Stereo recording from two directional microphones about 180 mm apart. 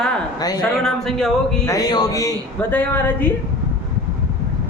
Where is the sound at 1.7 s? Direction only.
20° left (ahead or behind).